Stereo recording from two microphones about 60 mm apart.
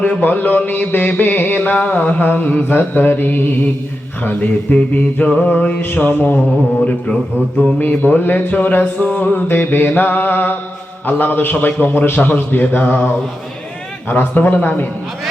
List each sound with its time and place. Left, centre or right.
0.0 s mantra: left
4.2 s a sound: left
7.8 s mantra: left